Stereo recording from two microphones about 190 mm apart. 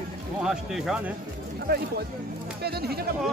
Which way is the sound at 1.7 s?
55° right (ahead or behind).